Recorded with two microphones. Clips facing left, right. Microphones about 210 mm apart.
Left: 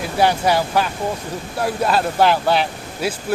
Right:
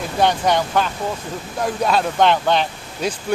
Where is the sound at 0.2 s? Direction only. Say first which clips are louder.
Left 1 dB; 5° left (ahead or behind).